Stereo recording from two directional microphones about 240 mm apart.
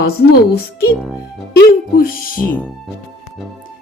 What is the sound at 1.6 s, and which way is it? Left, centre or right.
Speech, left.